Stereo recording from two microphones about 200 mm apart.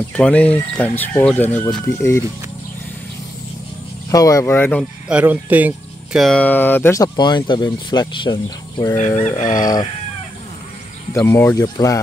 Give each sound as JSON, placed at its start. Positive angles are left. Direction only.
{"t": 0.1, "sound": "speech", "side_deg": 5}
{"t": 4.1, "sound": "speech", "side_deg": 15}
{"t": 5.0, "sound": "speech", "side_deg": -5}
{"t": 8.9, "sound": "livestock", "side_deg": 40}
{"t": 9.6, "sound": "speech", "side_deg": 20}
{"t": 11.2, "sound": "speech", "side_deg": 10}